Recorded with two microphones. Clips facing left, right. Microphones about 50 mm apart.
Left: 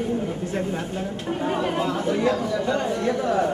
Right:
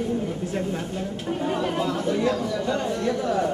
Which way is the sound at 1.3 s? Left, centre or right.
Left.